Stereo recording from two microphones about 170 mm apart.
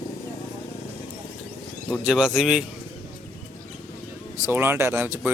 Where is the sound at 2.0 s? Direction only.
5° right (ahead or behind).